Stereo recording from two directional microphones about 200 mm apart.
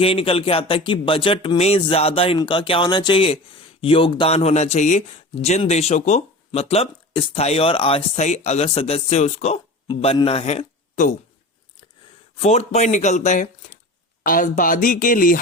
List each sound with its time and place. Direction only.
0.0 s speech: 30° left (ahead or behind)
12.4 s speech: 35° left (ahead or behind)